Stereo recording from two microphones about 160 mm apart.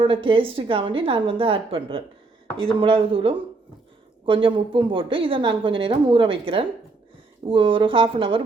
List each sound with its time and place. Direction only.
0.0 s a woman's voice: 35° right (ahead or behind)